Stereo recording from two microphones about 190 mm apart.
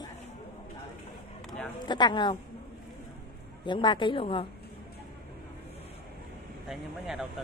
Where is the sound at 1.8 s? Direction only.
25° left (ahead or behind).